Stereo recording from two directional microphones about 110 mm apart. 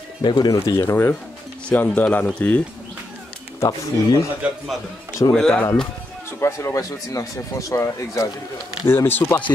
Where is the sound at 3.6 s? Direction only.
35° left (ahead or behind).